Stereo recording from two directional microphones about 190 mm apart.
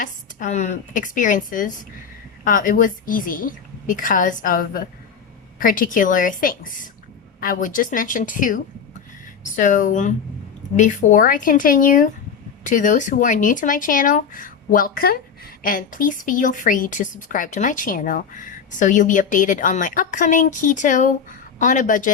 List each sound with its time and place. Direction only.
0.0 s a woman's voice: 40° left (ahead or behind)